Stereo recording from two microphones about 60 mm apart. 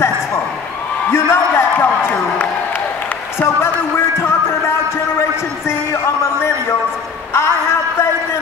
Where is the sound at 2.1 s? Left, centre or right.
Left.